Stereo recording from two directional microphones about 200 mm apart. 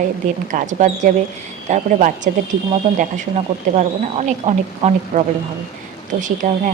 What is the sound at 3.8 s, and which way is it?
A woman's voice, 35° right (ahead or behind).